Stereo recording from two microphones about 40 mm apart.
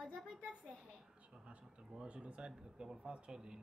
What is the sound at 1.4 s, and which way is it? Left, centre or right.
Speech, right.